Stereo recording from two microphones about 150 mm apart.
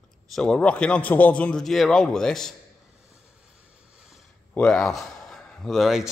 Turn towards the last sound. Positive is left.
turn(degrees=0)  # may be behind; listen again after turning